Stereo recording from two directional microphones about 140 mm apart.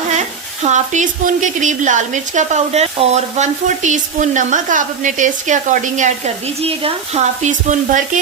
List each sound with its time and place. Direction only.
0.2 s speech: 55° right (ahead or behind)